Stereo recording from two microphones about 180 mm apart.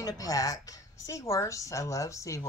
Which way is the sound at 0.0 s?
20° left (ahead or behind).